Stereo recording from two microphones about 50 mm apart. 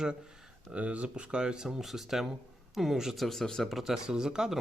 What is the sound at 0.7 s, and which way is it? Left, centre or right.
Speech, right.